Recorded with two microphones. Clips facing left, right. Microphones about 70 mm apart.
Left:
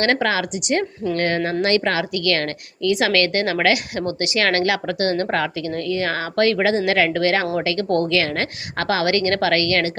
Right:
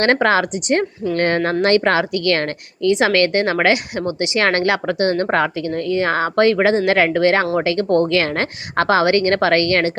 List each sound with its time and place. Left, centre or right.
0.0 s a woman's voice: right